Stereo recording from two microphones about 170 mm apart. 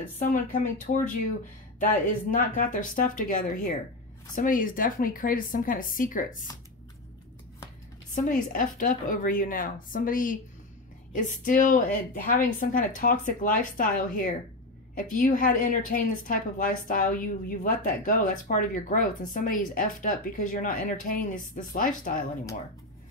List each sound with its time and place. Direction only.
0.2 s a woman's voice: 50° left (ahead or behind)
2.3 s a woman's voice: 55° left (ahead or behind)
8.1 s a woman's voice: 50° left (ahead or behind)